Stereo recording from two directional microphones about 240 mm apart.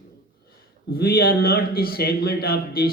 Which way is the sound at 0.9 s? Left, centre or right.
Left.